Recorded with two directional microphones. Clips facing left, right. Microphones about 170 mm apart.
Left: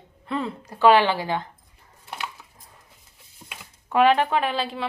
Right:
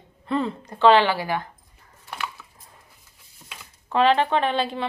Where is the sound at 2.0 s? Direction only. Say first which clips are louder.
Right 1 dB; 20° left (ahead or behind).